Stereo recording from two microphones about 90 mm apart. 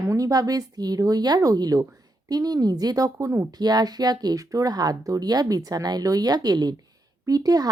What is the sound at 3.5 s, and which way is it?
Speech, 50° right (ahead or behind).